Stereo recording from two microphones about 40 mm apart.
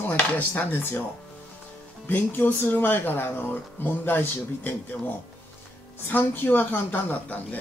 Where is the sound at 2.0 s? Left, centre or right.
Left.